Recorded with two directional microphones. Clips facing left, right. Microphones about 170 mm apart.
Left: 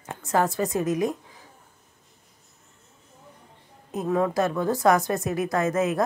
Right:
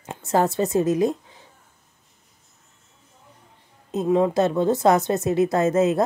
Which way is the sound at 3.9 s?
25° right (ahead or behind).